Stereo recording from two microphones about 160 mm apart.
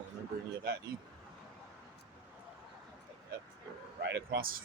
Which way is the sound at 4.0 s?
90° right.